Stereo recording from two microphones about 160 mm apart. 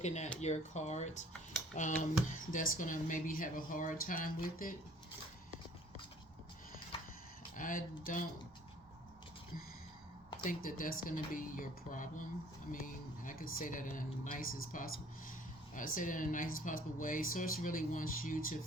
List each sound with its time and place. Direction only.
0.0 s speech: 45° left (ahead or behind)
7.5 s speech: 55° left (ahead or behind)
10.4 s speech: 60° left (ahead or behind)